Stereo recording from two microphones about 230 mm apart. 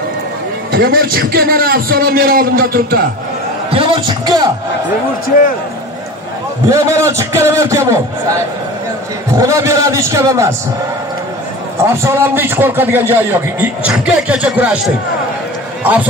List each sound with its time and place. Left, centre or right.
0.7 s a man's voice: right
3.7 s a man's voice: right
6.7 s a man's voice: centre
9.4 s a man's voice: centre
11.8 s a man's voice: centre
15.8 s a man's voice: centre